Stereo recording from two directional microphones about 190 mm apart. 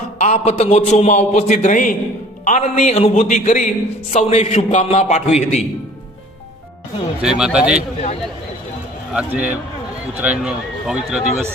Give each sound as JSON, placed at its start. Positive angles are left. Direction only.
{"t": 0.2, "sound": "a man's voice", "side_deg": 35}
{"t": 7.2, "sound": "speech", "side_deg": -5}
{"t": 9.1, "sound": "a man's voice", "side_deg": -10}